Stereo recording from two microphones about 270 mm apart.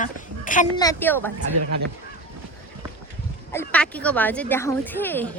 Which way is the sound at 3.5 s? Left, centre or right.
Centre.